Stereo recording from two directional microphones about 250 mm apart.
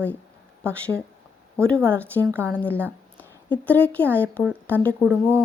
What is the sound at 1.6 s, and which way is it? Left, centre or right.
Speech, centre.